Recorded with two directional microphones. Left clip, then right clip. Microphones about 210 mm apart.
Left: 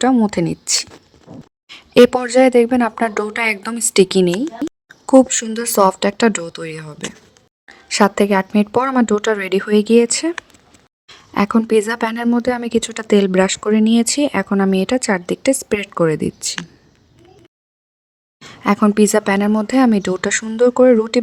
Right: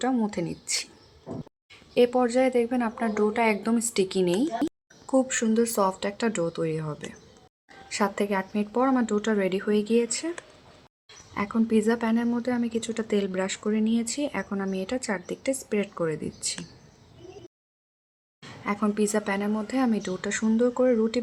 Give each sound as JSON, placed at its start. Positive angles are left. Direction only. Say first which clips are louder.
{"t": 0.0, "sound": "a woman's voice", "louder": "left 12 dB", "side_deg": 50}
{"t": 4.6, "sound": "a sound", "louder": "left 5 dB", "side_deg": 0}
{"t": 5.0, "sound": "a woman's voice", "louder": "left 12 dB", "side_deg": 50}
{"t": 7.9, "sound": "a woman's voice", "louder": "left 12 dB", "side_deg": 45}
{"t": 18.6, "sound": "a woman's voice", "louder": "left 12 dB", "side_deg": 50}